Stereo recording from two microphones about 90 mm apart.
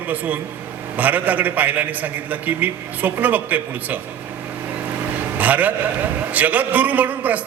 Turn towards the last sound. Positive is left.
turn(degrees=-20)  # may be behind; listen again after turning